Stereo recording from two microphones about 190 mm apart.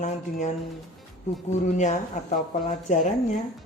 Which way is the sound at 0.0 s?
40° left (ahead or behind).